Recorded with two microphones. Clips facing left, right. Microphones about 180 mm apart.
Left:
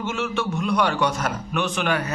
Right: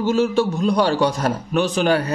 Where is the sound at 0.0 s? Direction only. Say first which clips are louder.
Right 8 dB; 35° right (ahead or behind).